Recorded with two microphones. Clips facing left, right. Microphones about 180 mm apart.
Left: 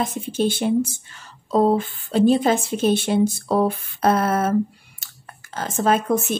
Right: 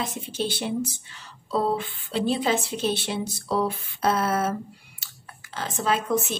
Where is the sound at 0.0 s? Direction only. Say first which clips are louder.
Left 7 dB; 50° left (ahead or behind).